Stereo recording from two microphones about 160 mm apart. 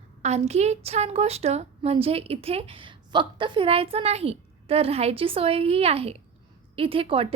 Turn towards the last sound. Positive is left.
turn(degrees=-35)  # may be behind; listen again after turning